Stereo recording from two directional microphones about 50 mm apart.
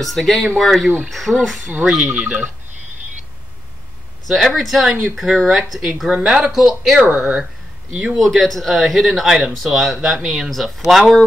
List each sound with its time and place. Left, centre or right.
0.0 s speech: centre
2.1 s speech: right
4.3 s speech: centre
6.0 s speech: centre
6.3 s speech: centre
7.9 s speech: centre
8.2 s speech: centre